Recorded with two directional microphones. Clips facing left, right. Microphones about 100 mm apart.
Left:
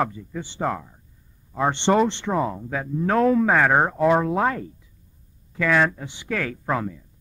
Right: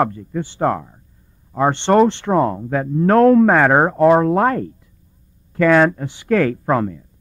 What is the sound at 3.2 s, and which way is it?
Speech, centre (ahead or behind).